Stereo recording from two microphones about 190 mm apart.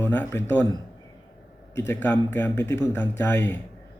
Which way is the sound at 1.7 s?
10° left (ahead or behind).